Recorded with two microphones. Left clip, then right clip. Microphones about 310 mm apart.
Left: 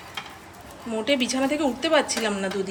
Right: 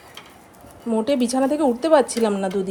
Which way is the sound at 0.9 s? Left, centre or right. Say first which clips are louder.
Right 3 dB; centre.